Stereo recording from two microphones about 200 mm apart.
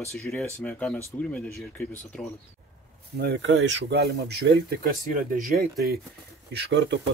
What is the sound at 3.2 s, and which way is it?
Speech, 60° right (ahead or behind).